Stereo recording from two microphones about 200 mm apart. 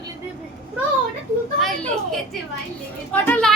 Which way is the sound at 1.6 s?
Centre (ahead or behind).